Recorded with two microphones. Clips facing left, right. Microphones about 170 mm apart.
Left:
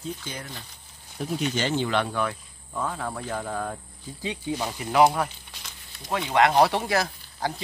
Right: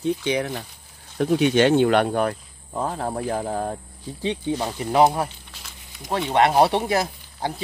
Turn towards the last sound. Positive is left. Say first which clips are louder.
# right 2 dB
turn(degrees=-20)  # may be behind; listen again after turning